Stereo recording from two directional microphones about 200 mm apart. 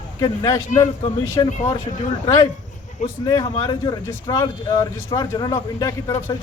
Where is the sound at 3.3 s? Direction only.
20° left (ahead or behind).